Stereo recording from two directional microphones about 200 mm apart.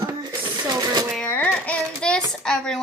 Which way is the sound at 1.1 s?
5° left (ahead or behind).